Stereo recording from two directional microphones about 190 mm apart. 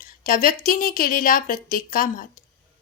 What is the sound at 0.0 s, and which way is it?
Speech, 45° left (ahead or behind).